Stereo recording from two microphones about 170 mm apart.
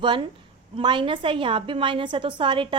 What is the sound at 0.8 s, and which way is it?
A woman's voice, 25° right (ahead or behind).